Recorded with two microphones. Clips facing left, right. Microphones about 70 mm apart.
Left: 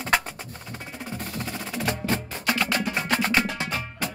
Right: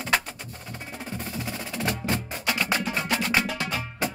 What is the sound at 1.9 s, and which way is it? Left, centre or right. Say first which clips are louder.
Music: left 1 dB; left.